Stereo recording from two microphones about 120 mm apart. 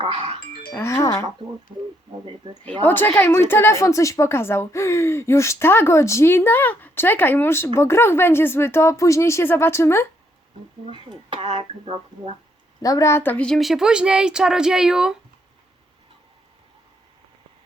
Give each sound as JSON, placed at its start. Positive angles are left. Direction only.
{"t": 0.0, "sound": "speech", "side_deg": -55}
{"t": 0.7, "sound": "a woman's voice", "side_deg": 20}
{"t": 2.2, "sound": "speech", "side_deg": -45}
{"t": 2.8, "sound": "a woman's voice", "side_deg": 15}
{"t": 10.8, "sound": "speech", "side_deg": -50}
{"t": 12.8, "sound": "a woman's voice", "side_deg": 25}